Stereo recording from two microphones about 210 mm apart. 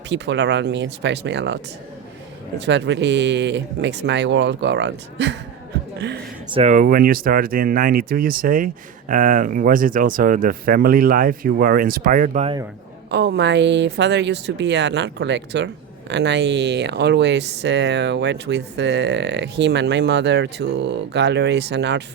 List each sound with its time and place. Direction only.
0.1 s speech: 55° right (ahead or behind)
2.6 s speech: 55° right (ahead or behind)
6.5 s speech: 35° right (ahead or behind)
13.1 s speech: 50° right (ahead or behind)